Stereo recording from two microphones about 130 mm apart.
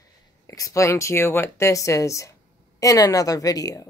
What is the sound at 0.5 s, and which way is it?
Speech, 25° left (ahead or behind).